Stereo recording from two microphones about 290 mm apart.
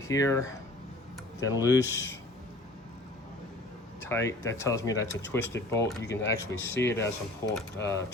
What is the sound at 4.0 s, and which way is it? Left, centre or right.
Speech, centre.